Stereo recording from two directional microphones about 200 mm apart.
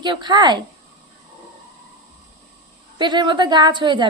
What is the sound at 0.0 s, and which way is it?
Speech, 20° right (ahead or behind).